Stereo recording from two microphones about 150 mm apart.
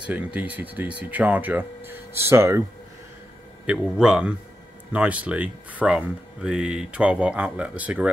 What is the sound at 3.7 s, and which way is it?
A man's voice, 5° right (ahead or behind).